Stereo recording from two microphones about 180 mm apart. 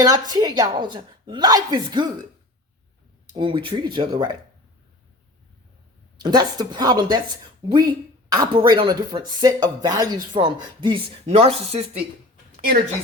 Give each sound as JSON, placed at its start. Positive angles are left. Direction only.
{"t": 0.0, "sound": "a woman's voice", "side_deg": -20}
{"t": 3.3, "sound": "a woman's voice", "side_deg": -25}
{"t": 6.1, "sound": "a woman's voice", "side_deg": -25}